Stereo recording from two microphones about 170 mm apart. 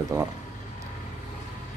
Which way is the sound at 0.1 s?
15° right (ahead or behind).